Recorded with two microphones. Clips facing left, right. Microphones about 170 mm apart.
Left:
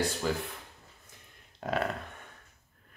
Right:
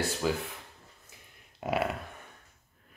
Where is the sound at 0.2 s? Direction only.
5° right (ahead or behind).